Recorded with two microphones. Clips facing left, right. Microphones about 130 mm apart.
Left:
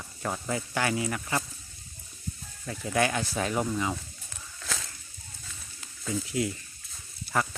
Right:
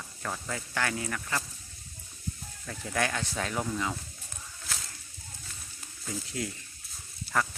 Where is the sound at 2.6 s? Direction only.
5° left (ahead or behind).